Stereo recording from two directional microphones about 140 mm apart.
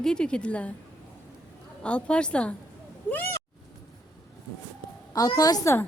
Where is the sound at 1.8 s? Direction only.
10° left (ahead or behind).